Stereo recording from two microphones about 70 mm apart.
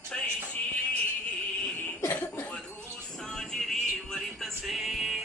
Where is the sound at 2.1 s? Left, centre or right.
Left.